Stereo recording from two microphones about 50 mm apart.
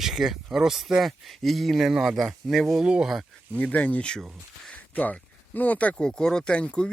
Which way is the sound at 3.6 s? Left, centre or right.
Left.